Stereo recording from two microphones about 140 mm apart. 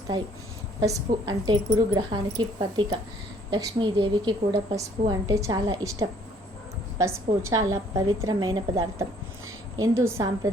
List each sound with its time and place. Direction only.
0.8 s a woman's voice: 25° right (ahead or behind)